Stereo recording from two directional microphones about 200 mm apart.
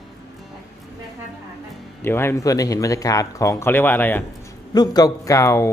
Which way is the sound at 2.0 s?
10° left (ahead or behind).